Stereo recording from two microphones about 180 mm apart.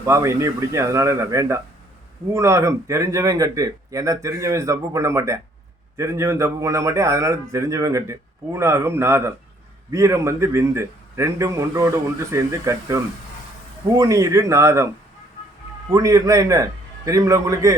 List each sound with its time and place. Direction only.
0.0 s speech: 15° right (ahead or behind)
15.9 s speech: 20° right (ahead or behind)